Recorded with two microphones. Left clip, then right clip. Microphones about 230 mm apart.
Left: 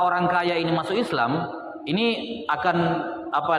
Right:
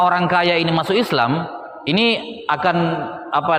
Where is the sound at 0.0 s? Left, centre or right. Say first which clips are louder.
Right 6 dB; right.